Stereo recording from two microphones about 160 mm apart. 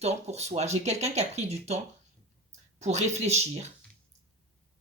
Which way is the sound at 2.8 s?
45° right (ahead or behind).